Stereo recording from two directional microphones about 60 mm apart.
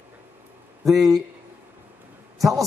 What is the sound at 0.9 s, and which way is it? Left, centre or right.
Speech, centre.